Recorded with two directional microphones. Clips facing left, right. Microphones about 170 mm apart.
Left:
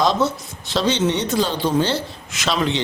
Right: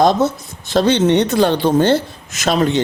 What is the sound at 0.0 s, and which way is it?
Speech, 50° right (ahead or behind).